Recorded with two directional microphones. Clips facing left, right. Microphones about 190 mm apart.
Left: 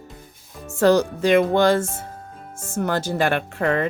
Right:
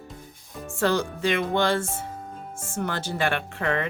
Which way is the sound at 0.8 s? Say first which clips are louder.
Left 7 dB; 40° left (ahead or behind).